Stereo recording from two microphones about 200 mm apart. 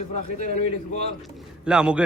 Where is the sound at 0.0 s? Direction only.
35° left (ahead or behind).